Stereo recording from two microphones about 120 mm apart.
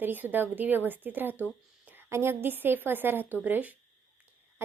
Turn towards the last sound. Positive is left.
turn(degrees=-15)  # may be behind; listen again after turning